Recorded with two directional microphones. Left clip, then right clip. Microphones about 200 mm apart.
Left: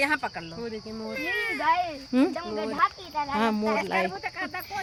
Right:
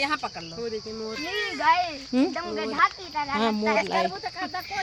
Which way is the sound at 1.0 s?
35° left (ahead or behind).